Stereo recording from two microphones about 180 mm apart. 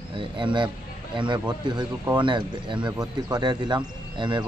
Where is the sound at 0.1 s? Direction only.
25° right (ahead or behind).